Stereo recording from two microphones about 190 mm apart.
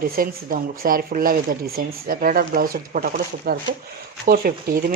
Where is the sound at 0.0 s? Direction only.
50° right (ahead or behind).